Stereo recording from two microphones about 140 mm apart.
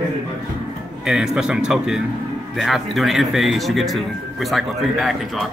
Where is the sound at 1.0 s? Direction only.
5° right (ahead or behind).